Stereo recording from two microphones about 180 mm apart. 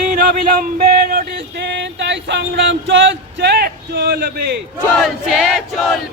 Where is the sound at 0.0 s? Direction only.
45° right (ahead or behind).